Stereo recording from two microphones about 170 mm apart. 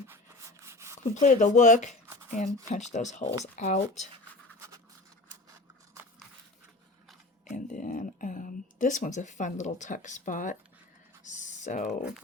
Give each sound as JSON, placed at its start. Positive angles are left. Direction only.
{"t": 0.6, "sound": "rub", "side_deg": -15}
{"t": 1.1, "sound": "speech", "side_deg": 45}
{"t": 7.5, "sound": "speech", "side_deg": 50}
{"t": 11.2, "sound": "typing", "side_deg": 45}